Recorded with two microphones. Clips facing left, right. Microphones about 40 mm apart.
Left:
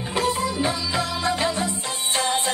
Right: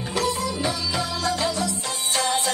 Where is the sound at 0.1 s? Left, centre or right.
Left.